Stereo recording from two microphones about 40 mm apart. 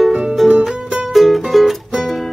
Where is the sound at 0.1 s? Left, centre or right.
Right.